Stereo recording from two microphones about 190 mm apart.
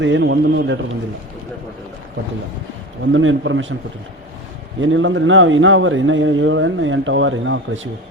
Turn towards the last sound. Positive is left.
turn(degrees=-90)